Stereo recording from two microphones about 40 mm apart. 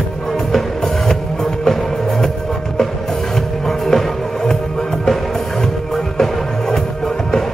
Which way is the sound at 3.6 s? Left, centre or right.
Centre.